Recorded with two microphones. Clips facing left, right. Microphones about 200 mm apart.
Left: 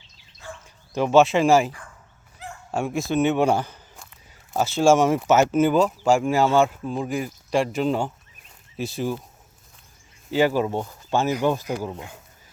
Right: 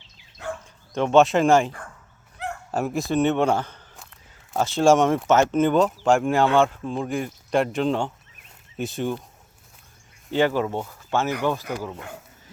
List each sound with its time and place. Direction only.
0.4 s bow-wow: 70° right (ahead or behind)
0.9 s speech: 5° left (ahead or behind)
2.4 s dog: 65° right (ahead or behind)
2.7 s speech: centre (ahead or behind)
10.3 s speech: 10° left (ahead or behind)